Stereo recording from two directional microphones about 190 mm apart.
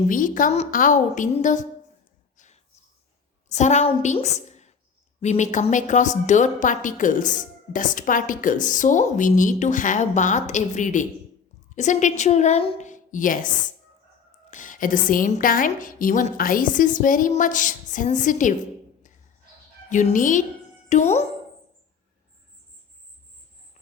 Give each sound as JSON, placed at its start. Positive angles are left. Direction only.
{"t": 0.1, "sound": "a woman's voice", "side_deg": 45}
{"t": 2.4, "sound": "a sound", "side_deg": 40}
{"t": 3.5, "sound": "a woman's voice", "side_deg": 35}
{"t": 14.5, "sound": "a woman's voice", "side_deg": 45}
{"t": 19.9, "sound": "a woman's voice", "side_deg": 40}